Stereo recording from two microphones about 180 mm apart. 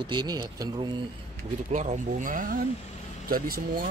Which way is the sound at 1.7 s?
40° right (ahead or behind).